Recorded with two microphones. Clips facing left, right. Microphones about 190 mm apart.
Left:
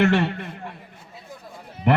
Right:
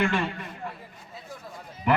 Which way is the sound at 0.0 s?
65° left (ahead or behind).